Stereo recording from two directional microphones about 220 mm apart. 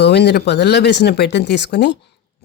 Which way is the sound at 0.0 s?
50° left (ahead or behind).